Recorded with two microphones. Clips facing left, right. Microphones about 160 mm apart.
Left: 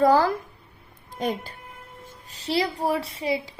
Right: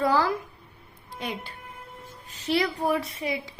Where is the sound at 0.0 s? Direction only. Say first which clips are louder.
Left 5 dB; 45° left (ahead or behind).